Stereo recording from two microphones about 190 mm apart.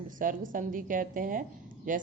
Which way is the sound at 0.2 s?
45° right (ahead or behind).